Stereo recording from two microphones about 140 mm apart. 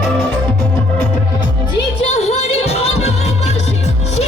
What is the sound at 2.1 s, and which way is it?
Music, 50° left (ahead or behind).